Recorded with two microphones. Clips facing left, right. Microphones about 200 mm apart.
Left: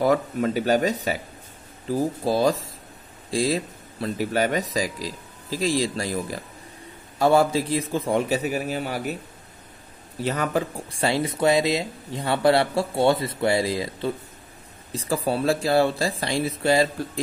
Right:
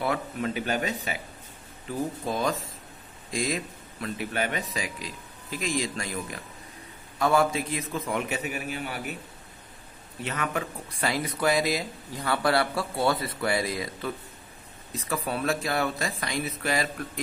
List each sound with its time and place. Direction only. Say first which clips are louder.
0.0 s speech: left 8 dB; 40° left (ahead or behind)
10.2 s speech: left 6 dB; 35° left (ahead or behind)